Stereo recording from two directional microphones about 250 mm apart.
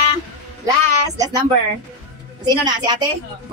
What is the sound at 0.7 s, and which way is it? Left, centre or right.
Speech, centre.